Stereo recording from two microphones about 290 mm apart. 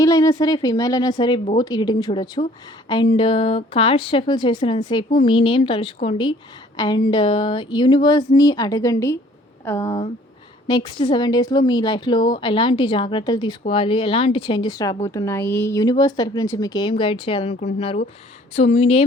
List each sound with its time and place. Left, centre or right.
0.0 s a woman's voice: centre